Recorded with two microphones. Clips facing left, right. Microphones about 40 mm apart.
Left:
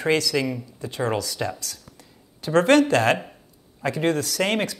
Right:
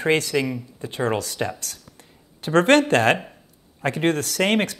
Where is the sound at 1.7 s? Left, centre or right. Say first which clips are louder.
Even; right.